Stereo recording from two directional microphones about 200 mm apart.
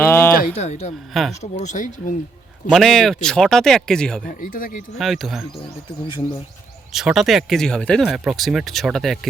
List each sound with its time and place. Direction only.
0.0 s a sound: 10° left (ahead or behind)
0.3 s speech: 35° left (ahead or behind)
2.6 s speech: centre (ahead or behind)
4.3 s speech: 40° left (ahead or behind)
4.9 s speech: centre (ahead or behind)
6.9 s speech: centre (ahead or behind)